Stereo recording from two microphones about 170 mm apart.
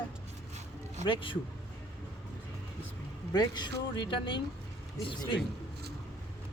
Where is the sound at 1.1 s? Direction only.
30° left (ahead or behind).